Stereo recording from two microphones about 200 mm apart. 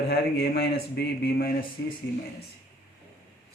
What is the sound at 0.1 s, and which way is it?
Speech, 55° left (ahead or behind).